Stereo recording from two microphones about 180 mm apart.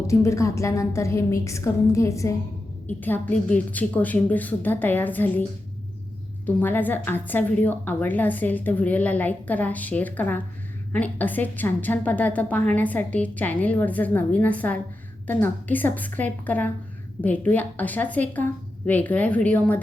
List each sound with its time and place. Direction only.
0.1 s a woman's voice: 15° left (ahead or behind)